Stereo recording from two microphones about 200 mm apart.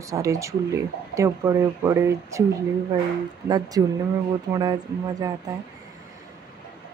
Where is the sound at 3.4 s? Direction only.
20° right (ahead or behind).